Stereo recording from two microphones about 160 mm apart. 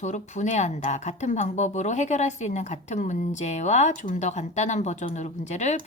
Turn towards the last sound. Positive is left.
turn(degrees=45)  # may be behind; listen again after turning